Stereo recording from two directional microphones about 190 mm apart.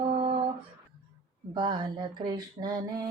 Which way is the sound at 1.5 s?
25° right (ahead or behind).